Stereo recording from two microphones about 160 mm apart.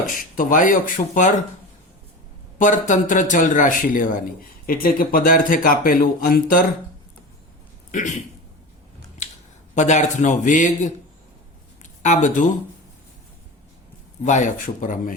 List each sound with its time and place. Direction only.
0.3 s a man's voice: 55° left (ahead or behind)
2.6 s a man's voice: 50° left (ahead or behind)
7.9 s a sound: 50° left (ahead or behind)
9.7 s a man's voice: 50° left (ahead or behind)
14.3 s a man's voice: 50° left (ahead or behind)